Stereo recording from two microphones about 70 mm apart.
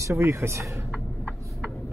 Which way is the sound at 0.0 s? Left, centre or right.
Right.